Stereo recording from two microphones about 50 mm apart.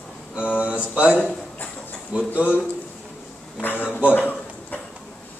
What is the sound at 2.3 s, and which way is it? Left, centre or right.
Speech, right.